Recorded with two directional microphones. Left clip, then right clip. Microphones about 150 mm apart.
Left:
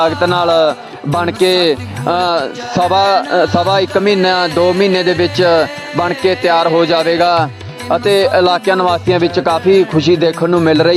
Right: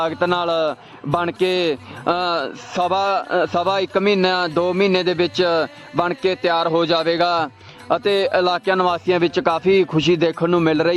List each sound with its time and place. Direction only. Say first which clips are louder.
0.0 s speech: left 7 dB; 40° left (ahead or behind)